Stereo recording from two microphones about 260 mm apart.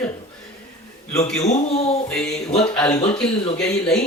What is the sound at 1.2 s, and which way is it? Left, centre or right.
Speech, centre.